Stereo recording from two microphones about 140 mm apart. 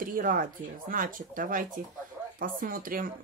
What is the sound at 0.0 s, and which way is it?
Speech, 80° right.